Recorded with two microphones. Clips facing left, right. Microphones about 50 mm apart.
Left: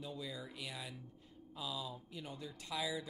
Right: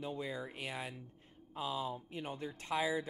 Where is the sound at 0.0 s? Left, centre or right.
Right.